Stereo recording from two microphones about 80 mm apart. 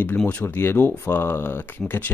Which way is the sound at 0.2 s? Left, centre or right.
Centre.